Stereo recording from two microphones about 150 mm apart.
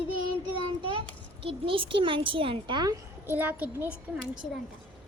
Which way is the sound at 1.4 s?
35° right (ahead or behind).